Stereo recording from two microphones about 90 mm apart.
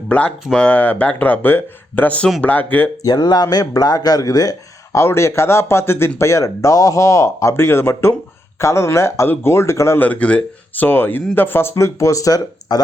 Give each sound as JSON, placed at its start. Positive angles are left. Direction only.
{"t": 0.1, "sound": "speech", "side_deg": 15}
{"t": 3.0, "sound": "speech", "side_deg": 45}
{"t": 10.0, "sound": "speech", "side_deg": 15}
{"t": 11.7, "sound": "speech", "side_deg": 35}